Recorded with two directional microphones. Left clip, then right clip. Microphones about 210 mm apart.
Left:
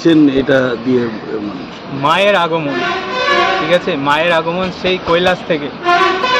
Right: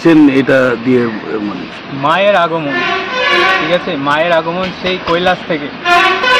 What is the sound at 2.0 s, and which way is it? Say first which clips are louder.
Speech: right 1 dB; 5° left (ahead or behind).